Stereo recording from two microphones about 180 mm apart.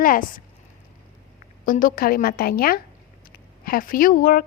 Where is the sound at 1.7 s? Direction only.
50° left (ahead or behind).